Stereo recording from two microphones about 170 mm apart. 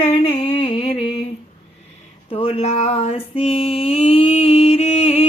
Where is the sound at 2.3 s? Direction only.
35° left (ahead or behind).